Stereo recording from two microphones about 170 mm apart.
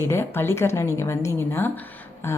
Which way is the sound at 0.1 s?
15° left (ahead or behind).